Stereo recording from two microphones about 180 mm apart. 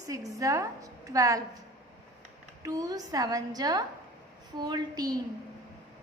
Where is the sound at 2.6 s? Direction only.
20° right (ahead or behind).